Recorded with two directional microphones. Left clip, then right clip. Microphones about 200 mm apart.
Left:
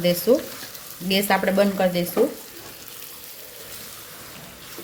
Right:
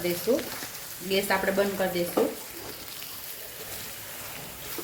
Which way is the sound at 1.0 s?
50° left (ahead or behind).